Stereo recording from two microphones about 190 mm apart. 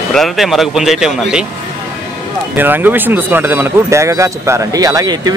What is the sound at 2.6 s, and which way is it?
Speech, 10° right (ahead or behind).